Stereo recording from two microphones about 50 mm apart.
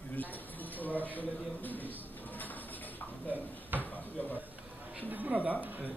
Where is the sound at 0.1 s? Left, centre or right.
Left.